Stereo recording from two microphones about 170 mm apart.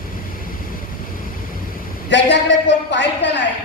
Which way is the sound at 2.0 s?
90° left.